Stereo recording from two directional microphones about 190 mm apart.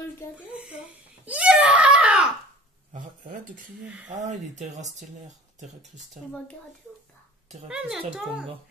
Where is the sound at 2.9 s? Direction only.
45° right (ahead or behind).